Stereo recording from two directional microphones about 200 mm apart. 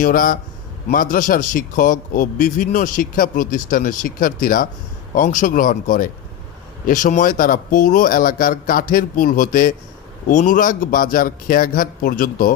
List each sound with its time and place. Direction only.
0.0 s a man's voice: 45° left (ahead or behind)